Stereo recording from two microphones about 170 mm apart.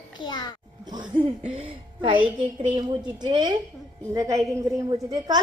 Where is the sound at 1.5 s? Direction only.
30° right (ahead or behind).